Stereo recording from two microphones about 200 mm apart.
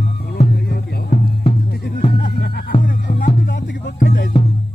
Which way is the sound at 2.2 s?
50° left (ahead or behind).